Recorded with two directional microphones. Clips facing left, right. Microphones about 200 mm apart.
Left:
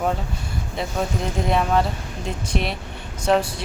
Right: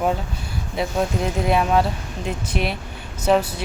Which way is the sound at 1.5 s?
5° right (ahead or behind).